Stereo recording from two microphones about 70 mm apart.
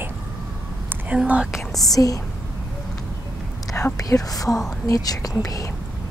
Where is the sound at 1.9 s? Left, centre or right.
Left.